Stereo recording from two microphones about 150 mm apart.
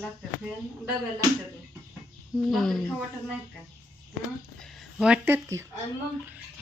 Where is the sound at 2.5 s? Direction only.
5° left (ahead or behind).